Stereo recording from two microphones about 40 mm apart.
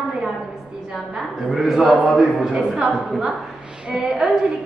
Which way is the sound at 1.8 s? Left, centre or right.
Right.